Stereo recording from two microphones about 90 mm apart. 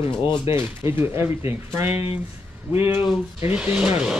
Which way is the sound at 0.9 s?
25° right (ahead or behind).